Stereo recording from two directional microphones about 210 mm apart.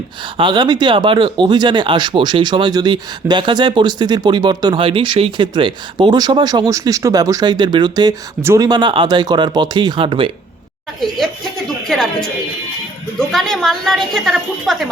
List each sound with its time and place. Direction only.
0.3 s speech: 20° right (ahead or behind)
11.9 s a woman's voice: centre (ahead or behind)